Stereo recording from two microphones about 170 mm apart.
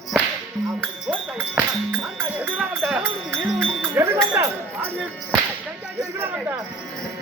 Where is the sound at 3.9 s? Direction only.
15° right (ahead or behind).